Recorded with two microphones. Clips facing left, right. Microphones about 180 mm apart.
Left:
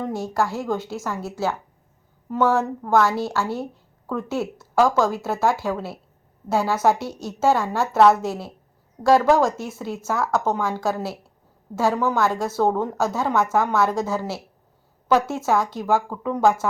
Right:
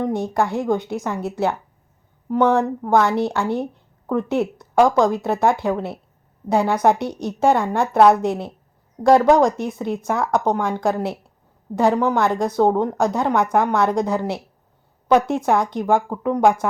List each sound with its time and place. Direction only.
0.0 s a woman's voice: 20° right (ahead or behind)